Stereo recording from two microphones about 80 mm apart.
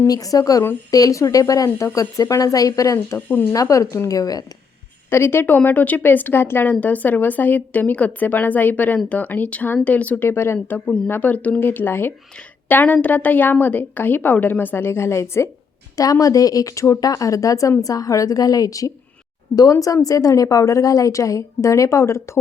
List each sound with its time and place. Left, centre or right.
0.1 s speech: left
3.2 s a woman's voice: left
3.5 s speech: left
5.1 s a woman's voice: left
10.2 s speech: left
10.8 s a woman's voice: centre; by 15.4 s left
16.0 s speech: left